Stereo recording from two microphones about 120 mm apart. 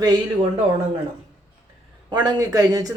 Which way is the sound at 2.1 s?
30° right (ahead or behind).